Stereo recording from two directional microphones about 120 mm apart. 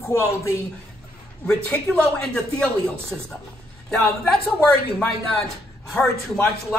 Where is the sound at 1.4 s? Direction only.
5° left (ahead or behind).